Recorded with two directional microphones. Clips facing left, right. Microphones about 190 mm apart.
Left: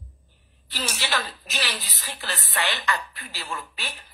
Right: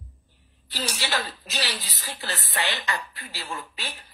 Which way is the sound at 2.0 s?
20° right (ahead or behind).